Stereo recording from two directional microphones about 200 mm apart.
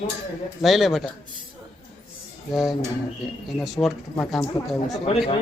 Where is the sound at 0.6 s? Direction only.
Centre (ahead or behind).